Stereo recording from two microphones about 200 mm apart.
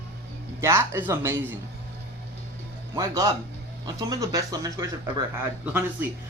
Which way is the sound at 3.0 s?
15° right (ahead or behind).